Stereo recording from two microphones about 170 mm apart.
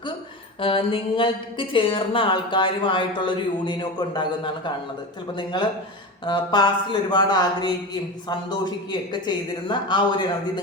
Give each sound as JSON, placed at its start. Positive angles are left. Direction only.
{"t": 0.6, "sound": "a woman's voice", "side_deg": 30}